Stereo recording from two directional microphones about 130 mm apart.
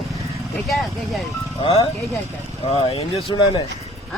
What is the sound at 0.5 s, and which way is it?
Speech, centre (ahead or behind).